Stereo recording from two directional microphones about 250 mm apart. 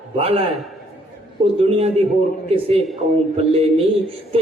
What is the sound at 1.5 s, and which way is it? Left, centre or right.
Speech, right.